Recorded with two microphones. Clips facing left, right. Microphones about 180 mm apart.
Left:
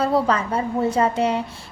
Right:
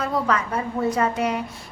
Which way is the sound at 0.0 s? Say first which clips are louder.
Left 4 dB; 30° left (ahead or behind).